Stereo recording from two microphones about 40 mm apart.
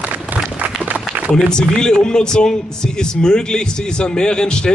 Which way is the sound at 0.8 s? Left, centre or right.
Right.